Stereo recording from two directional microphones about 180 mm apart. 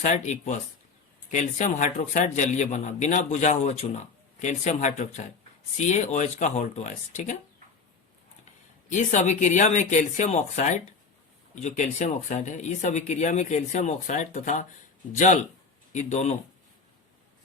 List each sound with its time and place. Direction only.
0.0 s a man's voice: 40° left (ahead or behind)
8.9 s a man's voice: 45° left (ahead or behind)